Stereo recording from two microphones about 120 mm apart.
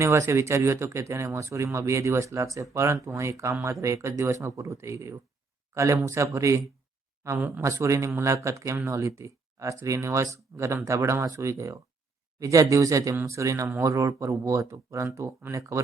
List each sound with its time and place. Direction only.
0.0 s speech: 25° right (ahead or behind)
7.3 s speech: 15° right (ahead or behind)
7.6 s speech: 25° right (ahead or behind)